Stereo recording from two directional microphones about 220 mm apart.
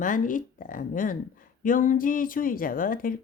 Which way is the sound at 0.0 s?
35° left (ahead or behind).